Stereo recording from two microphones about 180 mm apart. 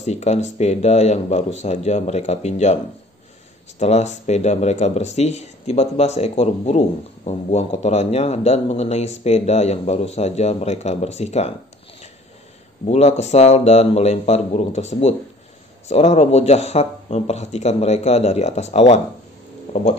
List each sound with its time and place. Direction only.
0.0 s a man's voice: 40° left (ahead or behind)
3.8 s a man's voice: 40° left (ahead or behind)
12.8 s a man's voice: 35° left (ahead or behind)